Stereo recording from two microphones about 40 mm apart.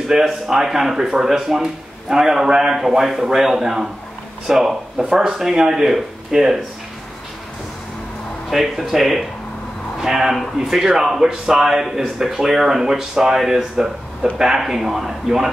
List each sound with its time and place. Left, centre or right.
0.0 s a man's voice: centre
8.5 s a man's voice: centre